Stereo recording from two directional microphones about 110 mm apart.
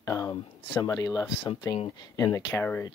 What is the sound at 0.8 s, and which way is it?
Speech, 30° left (ahead or behind).